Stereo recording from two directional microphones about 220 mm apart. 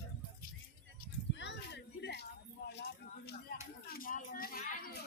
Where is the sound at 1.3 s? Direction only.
55° left (ahead or behind).